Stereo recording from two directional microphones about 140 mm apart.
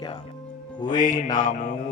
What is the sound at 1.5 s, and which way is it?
Mantra, 65° left (ahead or behind).